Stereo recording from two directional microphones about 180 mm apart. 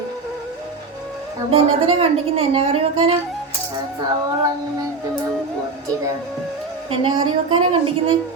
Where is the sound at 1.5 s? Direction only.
30° right (ahead or behind).